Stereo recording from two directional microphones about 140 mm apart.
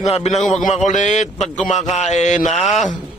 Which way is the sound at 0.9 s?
60° left (ahead or behind).